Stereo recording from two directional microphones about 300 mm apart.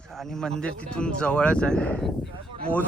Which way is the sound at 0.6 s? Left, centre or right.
Centre.